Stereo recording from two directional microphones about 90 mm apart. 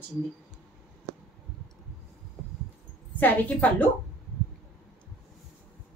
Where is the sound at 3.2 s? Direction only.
20° left (ahead or behind).